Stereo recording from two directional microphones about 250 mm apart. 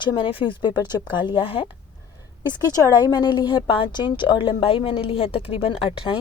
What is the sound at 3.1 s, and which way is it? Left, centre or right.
A woman's voice, centre.